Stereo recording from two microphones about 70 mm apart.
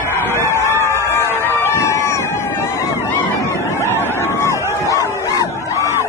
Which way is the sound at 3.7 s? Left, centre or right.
Left.